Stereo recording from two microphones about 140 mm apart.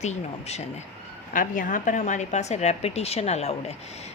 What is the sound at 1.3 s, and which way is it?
Speech, 70° left (ahead or behind).